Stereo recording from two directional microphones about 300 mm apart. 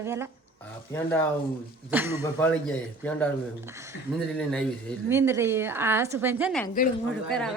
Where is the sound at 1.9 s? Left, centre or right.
Centre.